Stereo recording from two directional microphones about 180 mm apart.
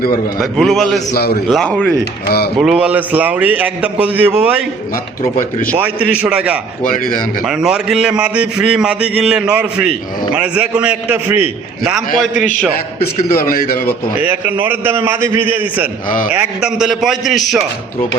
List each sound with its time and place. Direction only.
0.3 s a man's voice: centre (ahead or behind)
1.1 s speech: 60° left (ahead or behind)
1.5 s a man's voice: 5° left (ahead or behind)
5.7 s a man's voice: 5° right (ahead or behind)
6.8 s speech: 50° left (ahead or behind)
7.4 s a man's voice: 5° right (ahead or behind)
13.0 s speech: 55° left (ahead or behind)
14.2 s a man's voice: 10° right (ahead or behind)
16.0 s speech: 50° left (ahead or behind)
16.3 s a man's voice: 5° right (ahead or behind)